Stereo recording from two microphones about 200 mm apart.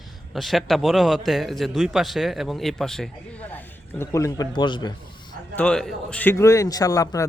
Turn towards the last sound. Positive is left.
turn(degrees=15)  # may be behind; listen again after turning